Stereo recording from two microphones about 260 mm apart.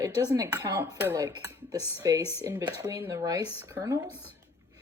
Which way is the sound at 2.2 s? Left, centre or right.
Left.